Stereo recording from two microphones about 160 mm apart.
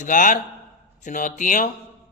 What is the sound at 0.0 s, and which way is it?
A man's voice, 55° left (ahead or behind).